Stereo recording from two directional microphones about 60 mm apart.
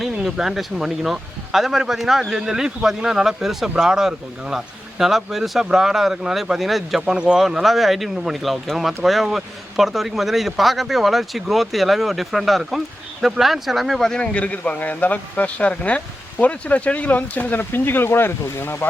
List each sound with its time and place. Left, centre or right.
0.3 s a man's voice: centre
7.0 s a man's voice: centre
14.0 s a man's voice: centre
14.3 s speech: left